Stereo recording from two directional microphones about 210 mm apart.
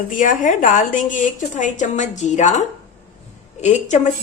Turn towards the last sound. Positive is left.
turn(degrees=35)  # may be behind; listen again after turning